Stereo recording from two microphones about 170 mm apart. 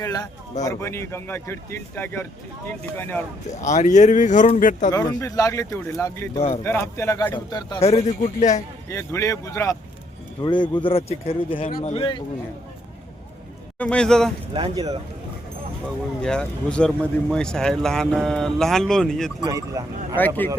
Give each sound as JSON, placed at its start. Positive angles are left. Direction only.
{"t": 0.0, "sound": "speech", "side_deg": 20}
{"t": 3.0, "sound": "speech", "side_deg": 10}
{"t": 3.6, "sound": "speech", "side_deg": 45}
{"t": 4.9, "sound": "speech", "side_deg": 20}
{"t": 7.9, "sound": "speech", "side_deg": 40}
{"t": 8.9, "sound": "speech", "side_deg": 15}
{"t": 13.7, "sound": "a man's voice", "side_deg": 5}
{"t": 14.5, "sound": "speech", "side_deg": -25}
{"t": 16.2, "sound": "a man's voice", "side_deg": 5}
{"t": 19.4, "sound": "speech", "side_deg": -20}
{"t": 20.1, "sound": "speech", "side_deg": 10}